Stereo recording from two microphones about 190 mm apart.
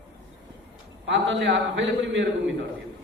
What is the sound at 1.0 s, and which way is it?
A man's voice, 70° right (ahead or behind).